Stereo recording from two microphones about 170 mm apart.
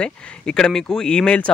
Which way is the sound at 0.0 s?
5° left (ahead or behind).